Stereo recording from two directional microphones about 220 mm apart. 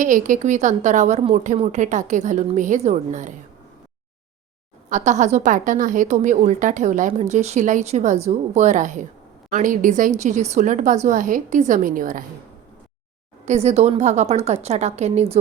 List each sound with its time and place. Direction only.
0.0 s a woman's voice: 35° right (ahead or behind)
4.9 s a woman's voice: 35° right (ahead or behind)
13.4 s a woman's voice: 30° right (ahead or behind)